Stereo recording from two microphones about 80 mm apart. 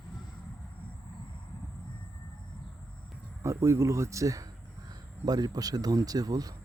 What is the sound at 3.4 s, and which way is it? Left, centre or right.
Speech, right.